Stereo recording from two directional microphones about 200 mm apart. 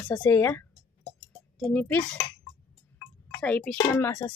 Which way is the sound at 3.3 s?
5° left (ahead or behind).